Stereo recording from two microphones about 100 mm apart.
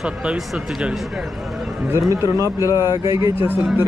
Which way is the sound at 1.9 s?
30° right (ahead or behind).